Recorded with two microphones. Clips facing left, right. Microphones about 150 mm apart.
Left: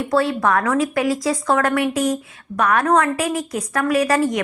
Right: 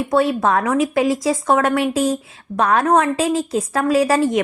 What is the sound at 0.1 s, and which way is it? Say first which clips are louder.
A woman's voice: right 1 dB; 20° right (ahead or behind).